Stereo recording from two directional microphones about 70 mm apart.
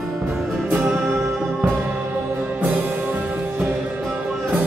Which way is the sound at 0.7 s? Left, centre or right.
Right.